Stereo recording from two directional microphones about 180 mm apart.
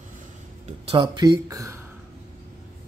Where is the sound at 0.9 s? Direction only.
25° right (ahead or behind).